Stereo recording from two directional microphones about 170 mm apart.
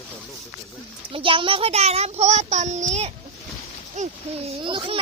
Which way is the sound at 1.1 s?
30° right (ahead or behind).